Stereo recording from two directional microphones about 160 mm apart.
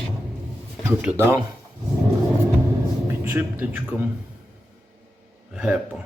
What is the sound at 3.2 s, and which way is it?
Speech, 10° right (ahead or behind).